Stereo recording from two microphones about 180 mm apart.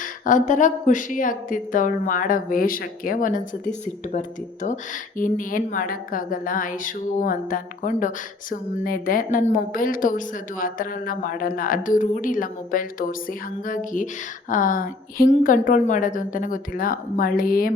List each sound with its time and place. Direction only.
0.0 s a woman's voice: 45° left (ahead or behind)
5.1 s a woman's voice: 50° left (ahead or behind)